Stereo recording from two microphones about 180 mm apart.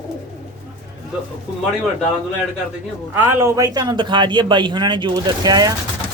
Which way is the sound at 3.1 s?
10° right (ahead or behind).